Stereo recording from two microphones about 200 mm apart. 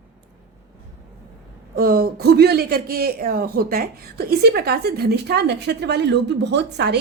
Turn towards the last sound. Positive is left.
turn(degrees=-55)  # may be behind; listen again after turning